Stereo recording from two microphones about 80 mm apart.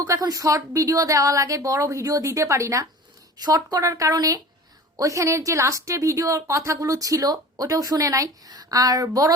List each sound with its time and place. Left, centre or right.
0.0 s a woman's voice: right
3.4 s a woman's voice: right